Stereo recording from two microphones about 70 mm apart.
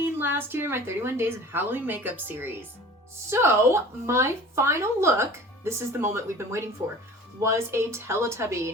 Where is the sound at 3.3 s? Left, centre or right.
Right.